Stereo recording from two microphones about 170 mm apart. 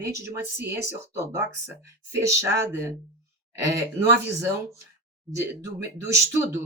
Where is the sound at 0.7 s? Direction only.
15° right (ahead or behind).